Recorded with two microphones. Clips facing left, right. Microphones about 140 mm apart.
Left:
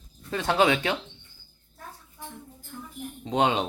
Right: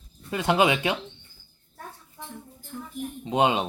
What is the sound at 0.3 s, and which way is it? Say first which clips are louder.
Speech: right 1 dB; 10° right (ahead or behind).